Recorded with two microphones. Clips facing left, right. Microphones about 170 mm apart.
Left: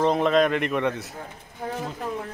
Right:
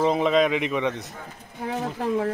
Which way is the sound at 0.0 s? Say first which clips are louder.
Even; centre (ahead or behind).